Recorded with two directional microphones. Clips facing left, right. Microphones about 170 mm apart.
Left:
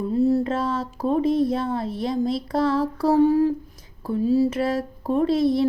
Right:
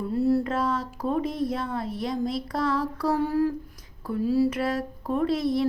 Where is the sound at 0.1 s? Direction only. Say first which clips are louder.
Left 3 dB; 20° left (ahead or behind).